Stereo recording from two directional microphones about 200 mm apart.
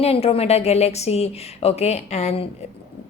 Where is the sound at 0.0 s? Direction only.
30° left (ahead or behind).